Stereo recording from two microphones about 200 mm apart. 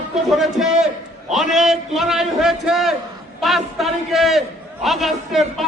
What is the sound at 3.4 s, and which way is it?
A man's voice, centre (ahead or behind).